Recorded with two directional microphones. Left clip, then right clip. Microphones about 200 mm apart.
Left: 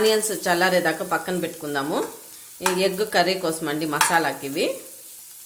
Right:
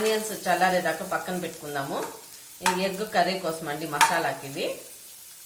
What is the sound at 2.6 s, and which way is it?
Stir, 55° left (ahead or behind).